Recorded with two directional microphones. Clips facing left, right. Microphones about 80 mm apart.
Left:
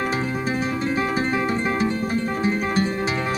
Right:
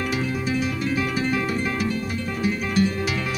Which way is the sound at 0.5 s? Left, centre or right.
Left.